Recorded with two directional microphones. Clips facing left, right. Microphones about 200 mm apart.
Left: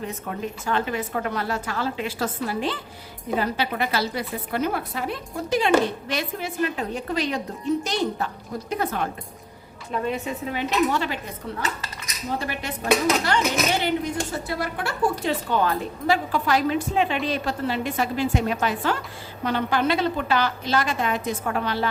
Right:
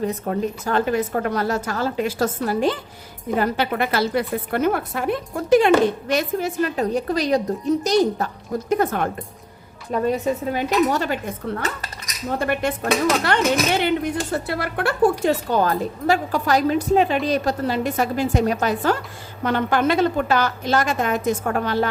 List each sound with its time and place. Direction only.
0.1 s a woman's voice: 40° right (ahead or behind)
12.4 s speech: 55° right (ahead or behind)
15.2 s a woman's voice: 45° right (ahead or behind)